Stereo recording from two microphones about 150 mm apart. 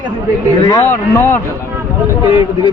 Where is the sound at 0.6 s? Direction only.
20° left (ahead or behind).